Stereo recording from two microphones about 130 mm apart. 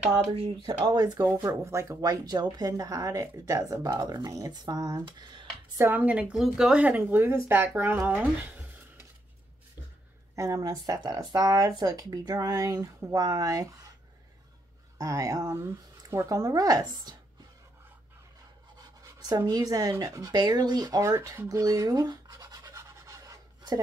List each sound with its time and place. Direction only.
0.1 s speech: 45° right (ahead or behind)
5.8 s speech: 15° right (ahead or behind)
10.3 s speech: 25° right (ahead or behind)
15.0 s speech: 25° right (ahead or behind)
18.8 s speech: 30° right (ahead or behind)